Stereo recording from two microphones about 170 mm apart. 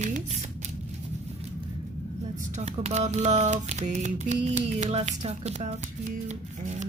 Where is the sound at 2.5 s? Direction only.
40° right (ahead or behind).